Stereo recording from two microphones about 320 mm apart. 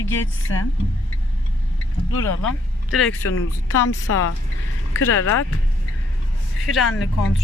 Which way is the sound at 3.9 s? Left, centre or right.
Left.